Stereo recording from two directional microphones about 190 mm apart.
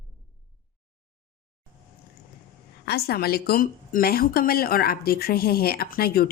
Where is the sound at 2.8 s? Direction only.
55° left (ahead or behind).